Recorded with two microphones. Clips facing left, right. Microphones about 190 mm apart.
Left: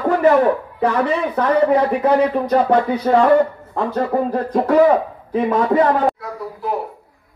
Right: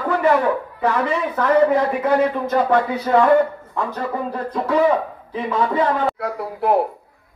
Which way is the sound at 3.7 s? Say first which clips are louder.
Left 8 dB; 40° left (ahead or behind).